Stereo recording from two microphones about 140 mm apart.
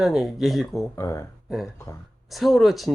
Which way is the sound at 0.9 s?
20° left (ahead or behind).